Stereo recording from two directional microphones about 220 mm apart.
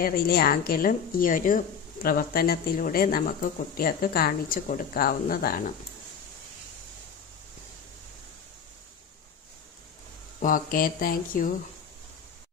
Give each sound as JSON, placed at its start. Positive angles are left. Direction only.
{"t": 0.0, "sound": "speech", "side_deg": 45}
{"t": 10.4, "sound": "speech", "side_deg": 40}